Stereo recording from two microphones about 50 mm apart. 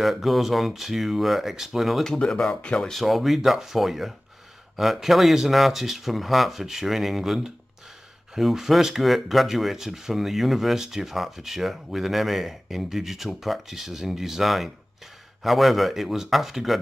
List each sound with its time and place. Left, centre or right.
0.0 s speech: centre
2.0 s speech: centre
2.9 s speech: centre